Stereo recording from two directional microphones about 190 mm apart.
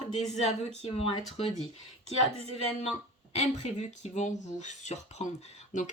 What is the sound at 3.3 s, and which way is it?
Speech, 35° left (ahead or behind).